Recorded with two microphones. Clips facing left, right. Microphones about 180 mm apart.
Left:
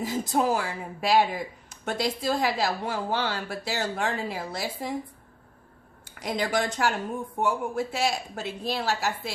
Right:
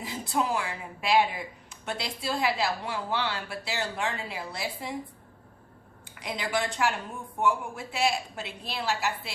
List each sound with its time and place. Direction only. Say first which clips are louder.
0.0 s speech: left 5 dB; 45° left (ahead or behind)
6.1 s speech: left 4 dB; 45° left (ahead or behind)